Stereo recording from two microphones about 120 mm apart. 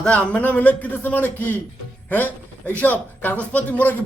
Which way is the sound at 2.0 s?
15° left (ahead or behind).